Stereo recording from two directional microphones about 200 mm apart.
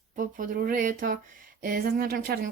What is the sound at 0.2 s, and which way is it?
A woman's voice, 40° right (ahead or behind).